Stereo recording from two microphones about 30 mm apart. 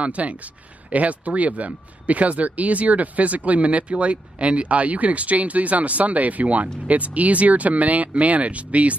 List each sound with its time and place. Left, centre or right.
0.0 s speech: right